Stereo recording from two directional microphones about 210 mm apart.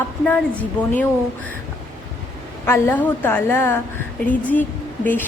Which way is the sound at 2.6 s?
10° left (ahead or behind).